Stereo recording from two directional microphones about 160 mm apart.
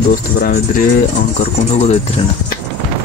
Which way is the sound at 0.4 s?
60° left (ahead or behind).